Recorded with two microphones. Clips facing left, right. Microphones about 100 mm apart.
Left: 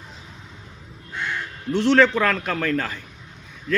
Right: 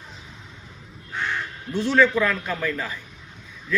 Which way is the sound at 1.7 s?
80° left.